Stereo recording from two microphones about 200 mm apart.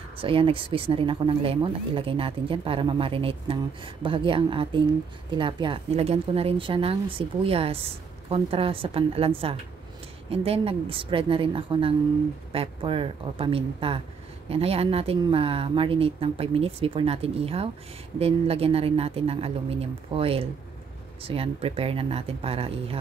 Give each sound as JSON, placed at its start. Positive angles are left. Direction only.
{"t": 0.2, "sound": "speech", "side_deg": -25}
{"t": 10.3, "sound": "speech", "side_deg": -30}